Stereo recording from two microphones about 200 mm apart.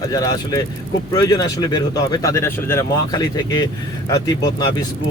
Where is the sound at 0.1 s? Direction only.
20° left (ahead or behind).